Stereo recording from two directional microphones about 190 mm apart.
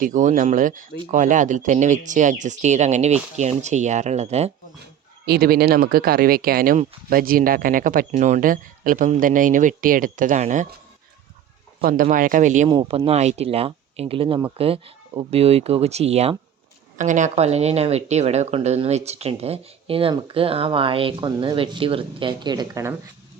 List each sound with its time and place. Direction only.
0.0 s speech: 40° right (ahead or behind)
5.2 s speech: 55° right (ahead or behind); by 10.7 s 40° right (ahead or behind)
11.8 s speech: 45° right (ahead or behind)
12.6 s speech: 25° right (ahead or behind)